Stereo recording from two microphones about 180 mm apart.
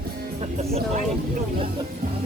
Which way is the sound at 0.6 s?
35° right (ahead or behind).